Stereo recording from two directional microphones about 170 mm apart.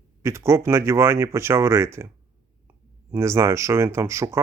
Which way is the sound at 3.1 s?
15° right (ahead or behind).